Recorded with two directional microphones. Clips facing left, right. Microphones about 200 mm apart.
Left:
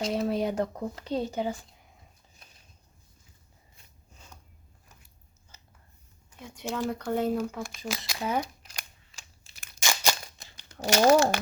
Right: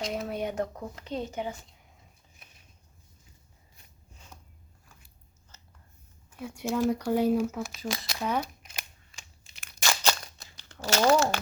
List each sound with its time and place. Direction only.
0.0 s speech: 30° left (ahead or behind)
6.3 s speech: 10° right (ahead or behind)
9.8 s crunch: 10° left (ahead or behind)
10.7 s speech: 15° left (ahead or behind)